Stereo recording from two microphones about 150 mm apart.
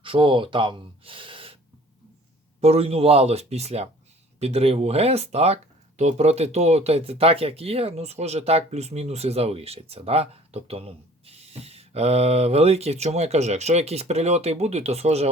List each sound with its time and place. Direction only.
0.0 s speech: 35° right (ahead or behind)
2.6 s speech: 45° right (ahead or behind)